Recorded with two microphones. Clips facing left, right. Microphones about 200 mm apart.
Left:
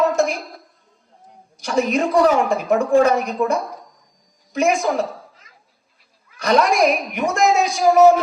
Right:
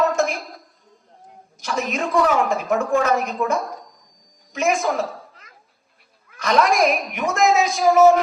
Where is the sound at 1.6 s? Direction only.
35° left (ahead or behind).